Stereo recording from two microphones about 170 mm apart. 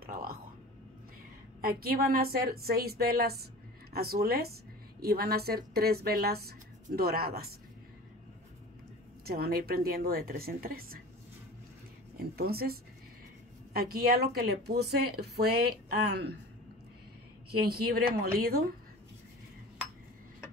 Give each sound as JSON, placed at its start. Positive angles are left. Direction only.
{"t": 0.0, "sound": "a sound", "side_deg": -60}
{"t": 1.6, "sound": "speech", "side_deg": -60}
{"t": 9.2, "sound": "speech", "side_deg": -65}
{"t": 12.4, "sound": "speech", "side_deg": -65}
{"t": 13.7, "sound": "speech", "side_deg": -65}
{"t": 17.5, "sound": "speech", "side_deg": -65}